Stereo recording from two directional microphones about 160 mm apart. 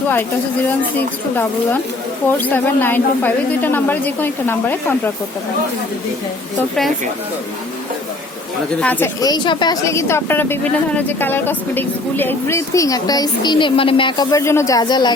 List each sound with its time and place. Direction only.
2.2 s speech: 10° left (ahead or behind)
8.8 s speech: 10° left (ahead or behind)
9.2 s speech: 25° left (ahead or behind)
9.9 s speech: 15° left (ahead or behind)